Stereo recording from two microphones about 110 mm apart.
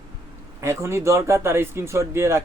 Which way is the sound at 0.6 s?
25° right (ahead or behind).